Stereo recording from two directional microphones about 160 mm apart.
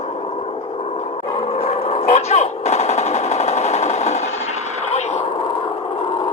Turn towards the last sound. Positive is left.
turn(degrees=45)  # may be behind; listen again after turning